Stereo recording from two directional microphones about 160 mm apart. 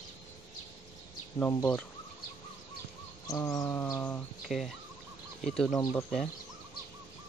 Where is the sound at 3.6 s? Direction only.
10° left (ahead or behind).